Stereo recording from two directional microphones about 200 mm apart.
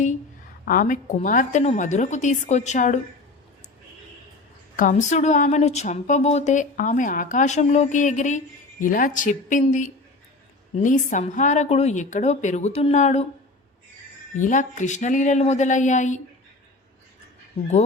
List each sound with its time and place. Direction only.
0.6 s a woman's voice: 45° left (ahead or behind)
4.8 s a woman's voice: 40° left (ahead or behind)
14.4 s a woman's voice: 40° left (ahead or behind)